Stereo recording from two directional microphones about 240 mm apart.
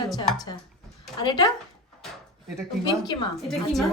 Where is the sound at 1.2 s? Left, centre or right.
Centre.